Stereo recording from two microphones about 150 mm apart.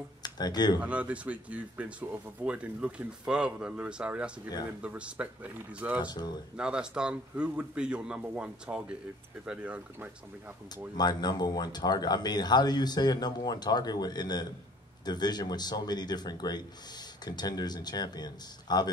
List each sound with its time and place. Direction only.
0.2 s speech: 25° left (ahead or behind)
0.7 s speech: 10° right (ahead or behind)
6.0 s speech: 25° left (ahead or behind)
6.5 s speech: 5° right (ahead or behind)
11.0 s speech: 25° left (ahead or behind)